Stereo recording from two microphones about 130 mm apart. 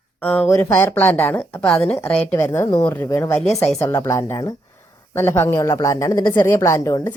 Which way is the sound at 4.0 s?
25° left (ahead or behind).